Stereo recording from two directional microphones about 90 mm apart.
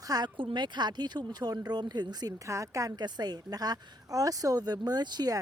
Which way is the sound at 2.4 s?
35° right (ahead or behind).